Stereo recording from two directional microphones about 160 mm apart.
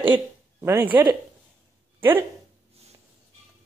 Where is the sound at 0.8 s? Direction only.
30° right (ahead or behind).